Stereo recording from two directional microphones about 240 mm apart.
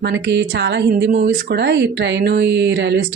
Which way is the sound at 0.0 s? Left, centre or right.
Right.